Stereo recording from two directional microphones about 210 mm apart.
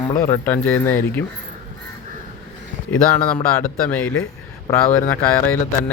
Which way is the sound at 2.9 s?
10° left (ahead or behind).